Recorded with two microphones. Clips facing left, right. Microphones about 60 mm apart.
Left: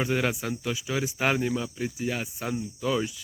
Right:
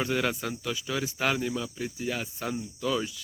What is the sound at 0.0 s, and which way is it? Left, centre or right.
Speech, centre.